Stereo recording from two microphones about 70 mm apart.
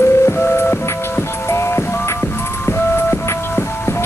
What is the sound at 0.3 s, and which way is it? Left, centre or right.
Music, left.